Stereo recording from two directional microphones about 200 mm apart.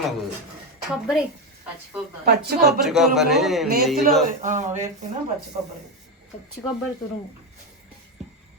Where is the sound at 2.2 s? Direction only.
50° right (ahead or behind).